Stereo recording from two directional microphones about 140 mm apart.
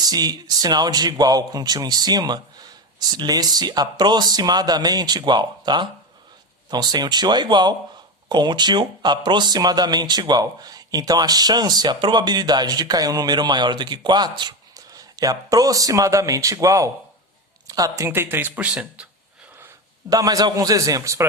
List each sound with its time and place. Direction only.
0.0 s a man's voice: 30° right (ahead or behind); by 19.0 s 10° right (ahead or behind)
19.5 s a man's voice: 20° right (ahead or behind)